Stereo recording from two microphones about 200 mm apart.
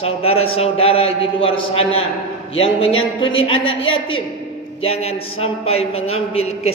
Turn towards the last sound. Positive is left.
turn(degrees=30)  # may be behind; listen again after turning